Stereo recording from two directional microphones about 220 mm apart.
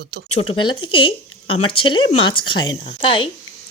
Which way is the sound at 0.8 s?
25° left (ahead or behind).